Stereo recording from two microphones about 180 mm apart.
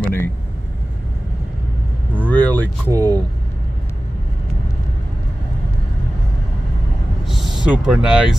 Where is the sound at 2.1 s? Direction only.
10° left (ahead or behind).